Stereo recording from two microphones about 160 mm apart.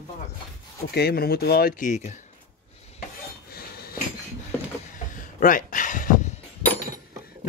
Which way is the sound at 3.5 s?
75° left (ahead or behind).